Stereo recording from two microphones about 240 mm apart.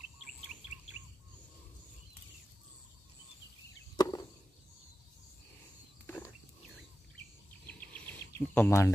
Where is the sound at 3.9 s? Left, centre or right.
Centre.